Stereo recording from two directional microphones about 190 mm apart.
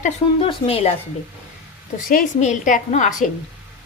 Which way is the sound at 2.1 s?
45° left (ahead or behind).